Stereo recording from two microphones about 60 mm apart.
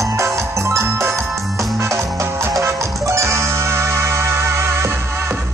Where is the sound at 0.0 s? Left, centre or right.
Right.